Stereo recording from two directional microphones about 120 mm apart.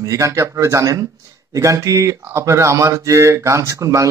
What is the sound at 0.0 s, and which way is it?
Speech, 25° right (ahead or behind).